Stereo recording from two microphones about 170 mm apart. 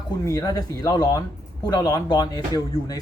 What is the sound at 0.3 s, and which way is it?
Speech, 20° left (ahead or behind).